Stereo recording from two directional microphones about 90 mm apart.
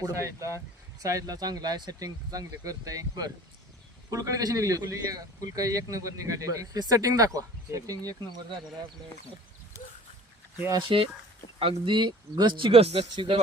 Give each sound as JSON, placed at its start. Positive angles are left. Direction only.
{"t": 0.0, "sound": "speech", "side_deg": -35}
{"t": 10.8, "sound": "speech", "side_deg": -80}
{"t": 11.6, "sound": "speech", "side_deg": -65}